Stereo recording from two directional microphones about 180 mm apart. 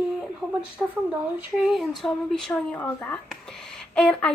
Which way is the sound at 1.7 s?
Centre (ahead or behind).